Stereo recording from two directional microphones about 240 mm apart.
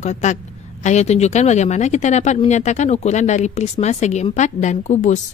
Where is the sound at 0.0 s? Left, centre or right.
Left.